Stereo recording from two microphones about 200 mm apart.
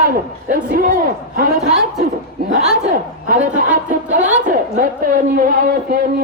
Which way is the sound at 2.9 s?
45° right (ahead or behind).